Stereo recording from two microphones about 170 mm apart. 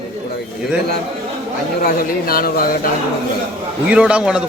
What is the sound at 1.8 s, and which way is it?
Speech, 60° left (ahead or behind).